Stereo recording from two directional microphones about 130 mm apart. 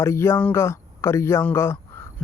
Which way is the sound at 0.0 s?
20° left (ahead or behind).